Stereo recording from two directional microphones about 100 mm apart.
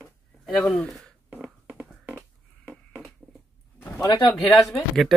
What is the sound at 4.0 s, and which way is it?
Speech, 40° left (ahead or behind).